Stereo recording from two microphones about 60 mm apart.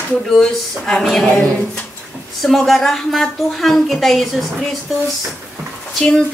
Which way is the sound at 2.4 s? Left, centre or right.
Centre.